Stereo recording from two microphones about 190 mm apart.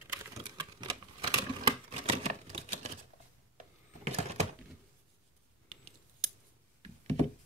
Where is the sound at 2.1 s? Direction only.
30° right (ahead or behind).